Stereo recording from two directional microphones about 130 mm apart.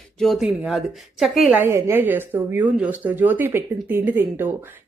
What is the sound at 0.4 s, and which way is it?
A woman's voice, 5° right (ahead or behind).